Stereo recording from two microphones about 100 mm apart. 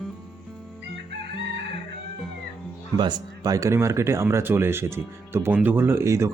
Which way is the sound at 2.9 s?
45° right (ahead or behind).